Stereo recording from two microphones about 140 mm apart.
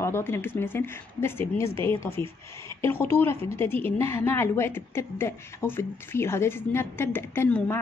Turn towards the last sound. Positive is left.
turn(degrees=15)  # may be behind; listen again after turning